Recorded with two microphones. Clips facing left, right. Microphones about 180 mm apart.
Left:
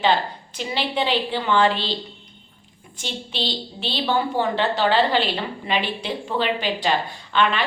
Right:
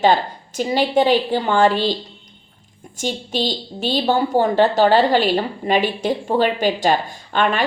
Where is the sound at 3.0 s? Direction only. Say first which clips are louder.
Right 7 dB; 45° right (ahead or behind).